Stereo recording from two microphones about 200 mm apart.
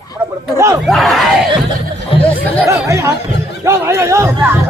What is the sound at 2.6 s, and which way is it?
Speech, 15° right (ahead or behind).